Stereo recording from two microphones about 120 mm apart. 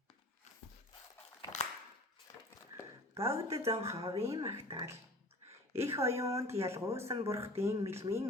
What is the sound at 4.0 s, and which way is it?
Speech, 55° right (ahead or behind).